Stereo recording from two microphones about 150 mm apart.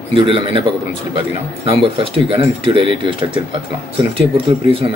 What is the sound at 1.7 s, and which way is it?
Speech, 35° right (ahead or behind).